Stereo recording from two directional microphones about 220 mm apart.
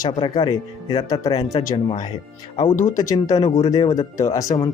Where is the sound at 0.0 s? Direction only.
20° left (ahead or behind).